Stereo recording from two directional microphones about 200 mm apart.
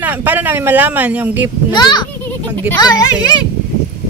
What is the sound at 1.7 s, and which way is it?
Speech, 20° left (ahead or behind).